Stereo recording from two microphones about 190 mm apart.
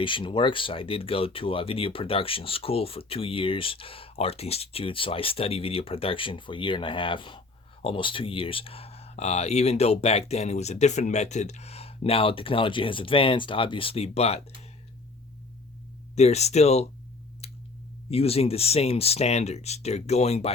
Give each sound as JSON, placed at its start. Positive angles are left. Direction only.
{"t": 0.0, "sound": "speech", "side_deg": 25}
{"t": 16.1, "sound": "speech", "side_deg": 35}
{"t": 17.4, "sound": "a sound", "side_deg": 30}
{"t": 18.1, "sound": "speech", "side_deg": 30}